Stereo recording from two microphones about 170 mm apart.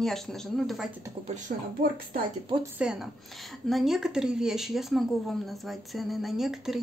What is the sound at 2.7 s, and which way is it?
Speech, 5° right (ahead or behind).